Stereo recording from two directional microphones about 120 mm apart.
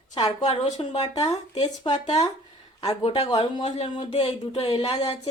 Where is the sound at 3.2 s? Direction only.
45° left (ahead or behind).